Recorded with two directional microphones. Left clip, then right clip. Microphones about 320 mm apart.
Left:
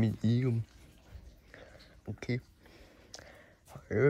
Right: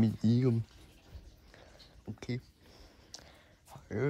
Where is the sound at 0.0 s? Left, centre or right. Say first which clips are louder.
Right 2 dB; centre.